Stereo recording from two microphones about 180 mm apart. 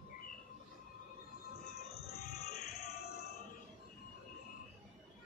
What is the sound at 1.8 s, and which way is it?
Music, 60° left (ahead or behind).